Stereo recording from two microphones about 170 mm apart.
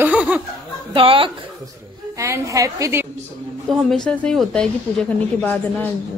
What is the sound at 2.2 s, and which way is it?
Speech, 20° right (ahead or behind).